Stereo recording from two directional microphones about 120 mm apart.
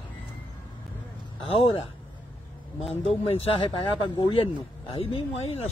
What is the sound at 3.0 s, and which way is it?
Speech, 50° left (ahead or behind).